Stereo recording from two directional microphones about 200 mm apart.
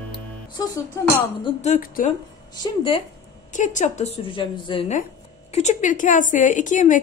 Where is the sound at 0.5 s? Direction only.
20° left (ahead or behind).